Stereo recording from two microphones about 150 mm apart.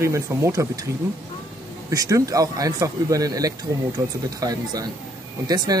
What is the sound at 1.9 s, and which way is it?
Speech, 20° right (ahead or behind).